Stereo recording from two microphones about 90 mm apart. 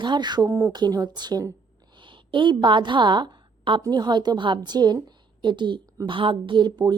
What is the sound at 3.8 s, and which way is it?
A woman's voice, 50° right (ahead or behind).